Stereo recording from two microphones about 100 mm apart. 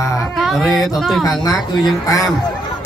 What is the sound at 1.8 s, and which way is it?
Speech, 35° left (ahead or behind).